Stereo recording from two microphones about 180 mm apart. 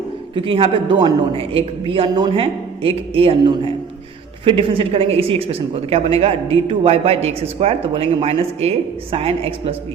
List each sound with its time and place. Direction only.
0.3 s a man's voice: 30° right (ahead or behind)